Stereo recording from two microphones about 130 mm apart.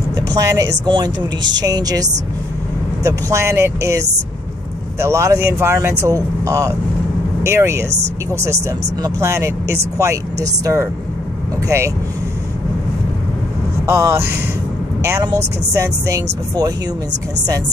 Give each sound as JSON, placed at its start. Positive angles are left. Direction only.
{"t": 0.1, "sound": "a woman's voice", "side_deg": -30}
{"t": 13.8, "sound": "a woman's voice", "side_deg": -20}
{"t": 15.7, "sound": "a woman's voice", "side_deg": -25}